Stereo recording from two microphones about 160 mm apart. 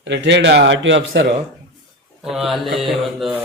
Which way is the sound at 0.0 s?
90° right.